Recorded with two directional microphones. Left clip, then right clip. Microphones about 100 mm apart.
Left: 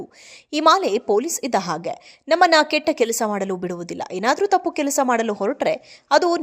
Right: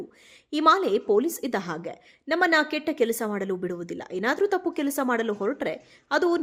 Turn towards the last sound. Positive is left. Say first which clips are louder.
# left 7 dB
turn(degrees=25)  # may be behind; listen again after turning